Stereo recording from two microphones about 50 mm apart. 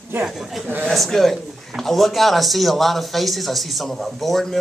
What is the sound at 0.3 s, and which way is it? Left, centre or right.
Speech, centre.